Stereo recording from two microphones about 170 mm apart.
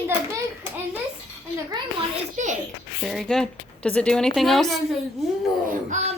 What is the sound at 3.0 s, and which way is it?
A woman's voice, centre (ahead or behind).